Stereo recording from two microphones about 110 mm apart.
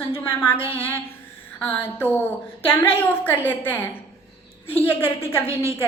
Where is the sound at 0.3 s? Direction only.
20° left (ahead or behind).